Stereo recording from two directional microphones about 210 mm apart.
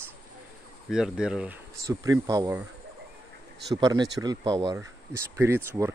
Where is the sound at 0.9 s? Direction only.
5° right (ahead or behind).